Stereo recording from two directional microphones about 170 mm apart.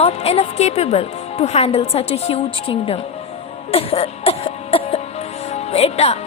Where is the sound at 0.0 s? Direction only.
35° left (ahead or behind).